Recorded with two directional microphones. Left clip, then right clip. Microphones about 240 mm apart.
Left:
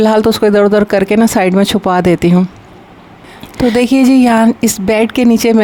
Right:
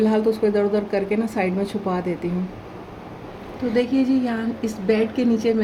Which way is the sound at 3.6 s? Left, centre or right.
Left.